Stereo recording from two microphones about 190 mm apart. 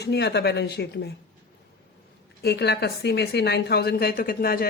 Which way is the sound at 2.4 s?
60° left (ahead or behind).